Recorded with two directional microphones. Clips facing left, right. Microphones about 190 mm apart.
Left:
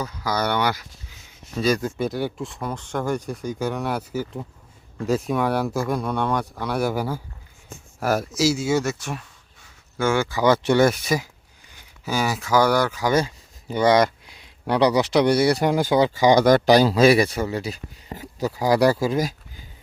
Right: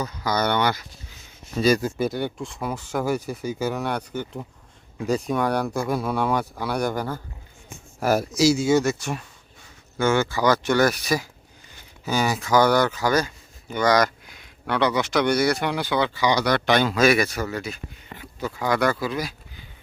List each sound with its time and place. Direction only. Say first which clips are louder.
0.0 s speech: right 1 dB; 5° left (ahead or behind)
10.4 s speech: left 4 dB; 25° left (ahead or behind)
11.7 s speech: right 1 dB; 10° left (ahead or behind)
13.1 s speech: left 1 dB; 25° left (ahead or behind); by 19.3 s 45° left (ahead or behind)